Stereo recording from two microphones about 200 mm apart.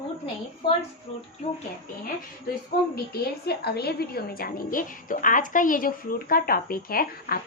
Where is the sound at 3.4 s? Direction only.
55° left (ahead or behind).